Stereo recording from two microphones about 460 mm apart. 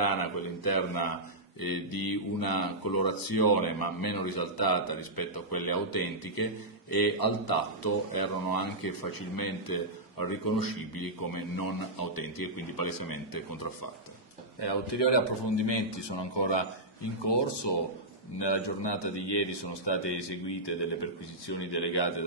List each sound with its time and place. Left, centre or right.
0.0 s speech: left
14.6 s a man's voice: left